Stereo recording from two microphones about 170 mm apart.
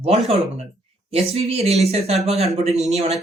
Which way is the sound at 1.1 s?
35° right (ahead or behind).